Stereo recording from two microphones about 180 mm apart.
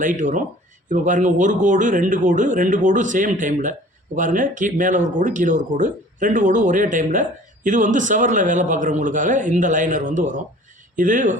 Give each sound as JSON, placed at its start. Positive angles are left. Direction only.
{"t": 0.0, "sound": "a man's voice", "side_deg": -45}